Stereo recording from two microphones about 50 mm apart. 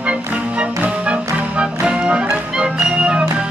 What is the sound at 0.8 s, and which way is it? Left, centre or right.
Music, right.